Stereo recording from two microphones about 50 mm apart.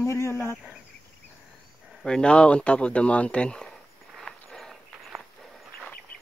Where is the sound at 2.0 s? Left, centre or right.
Centre.